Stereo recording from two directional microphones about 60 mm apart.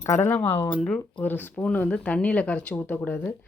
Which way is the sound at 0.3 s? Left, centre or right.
Left.